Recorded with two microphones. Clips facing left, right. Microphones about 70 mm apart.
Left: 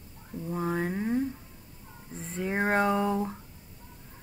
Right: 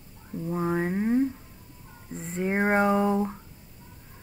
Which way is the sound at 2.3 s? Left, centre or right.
Right.